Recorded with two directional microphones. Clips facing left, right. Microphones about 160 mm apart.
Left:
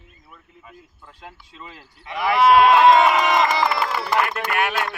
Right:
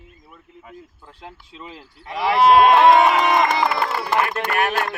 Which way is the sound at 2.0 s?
30° right (ahead or behind).